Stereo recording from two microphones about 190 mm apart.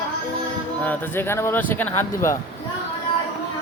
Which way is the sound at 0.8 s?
10° left (ahead or behind).